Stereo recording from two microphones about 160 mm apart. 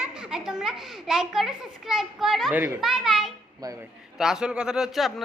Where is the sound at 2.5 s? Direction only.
15° right (ahead or behind).